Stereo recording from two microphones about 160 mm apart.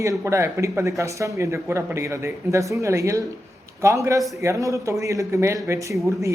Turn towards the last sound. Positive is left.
turn(degrees=-20)  # may be behind; listen again after turning